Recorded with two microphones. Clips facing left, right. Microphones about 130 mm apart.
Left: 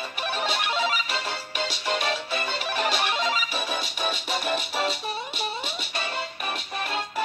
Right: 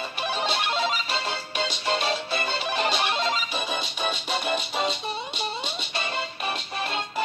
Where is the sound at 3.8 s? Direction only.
5° left (ahead or behind).